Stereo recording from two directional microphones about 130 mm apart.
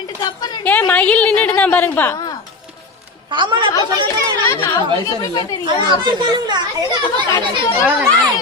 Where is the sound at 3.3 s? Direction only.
40° right (ahead or behind).